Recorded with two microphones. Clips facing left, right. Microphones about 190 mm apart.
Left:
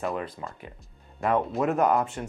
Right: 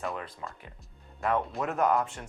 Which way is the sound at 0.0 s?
25° left (ahead or behind).